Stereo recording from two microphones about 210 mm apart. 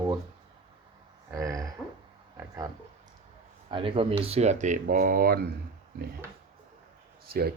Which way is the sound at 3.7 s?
25° right (ahead or behind).